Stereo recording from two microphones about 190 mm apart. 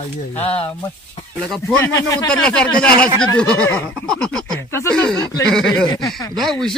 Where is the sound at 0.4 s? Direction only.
30° left (ahead or behind).